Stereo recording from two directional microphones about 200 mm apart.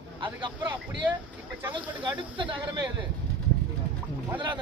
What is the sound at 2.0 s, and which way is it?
Speech, 25° right (ahead or behind).